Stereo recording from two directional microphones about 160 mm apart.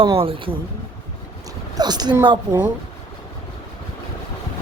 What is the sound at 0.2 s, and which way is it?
Speech, 35° right (ahead or behind).